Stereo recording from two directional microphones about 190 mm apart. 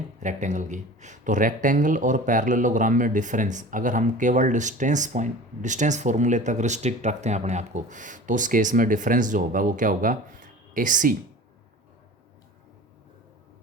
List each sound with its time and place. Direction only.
0.2 s speech: 40° right (ahead or behind)